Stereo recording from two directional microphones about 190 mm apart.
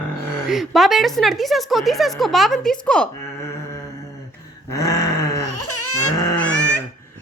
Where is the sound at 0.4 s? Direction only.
Centre (ahead or behind).